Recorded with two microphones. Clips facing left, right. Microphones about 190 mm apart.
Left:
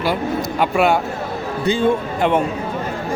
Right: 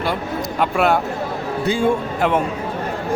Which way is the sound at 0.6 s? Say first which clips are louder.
Left 1 dB; centre (ahead or behind).